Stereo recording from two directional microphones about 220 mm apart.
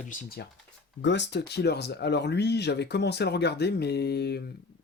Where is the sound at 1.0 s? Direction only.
55° left (ahead or behind).